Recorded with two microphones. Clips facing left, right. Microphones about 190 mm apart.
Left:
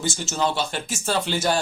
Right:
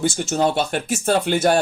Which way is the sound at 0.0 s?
55° right (ahead or behind).